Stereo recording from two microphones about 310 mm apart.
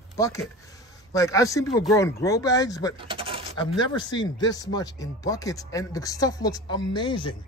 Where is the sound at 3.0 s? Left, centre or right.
Centre.